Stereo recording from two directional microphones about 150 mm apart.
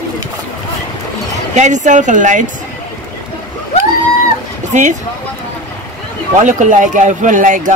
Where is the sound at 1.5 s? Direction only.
50° right (ahead or behind).